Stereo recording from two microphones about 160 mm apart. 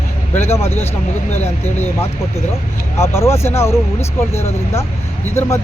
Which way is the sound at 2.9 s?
15° left (ahead or behind).